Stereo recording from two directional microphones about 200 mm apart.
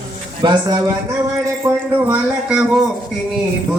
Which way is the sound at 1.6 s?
5° right (ahead or behind).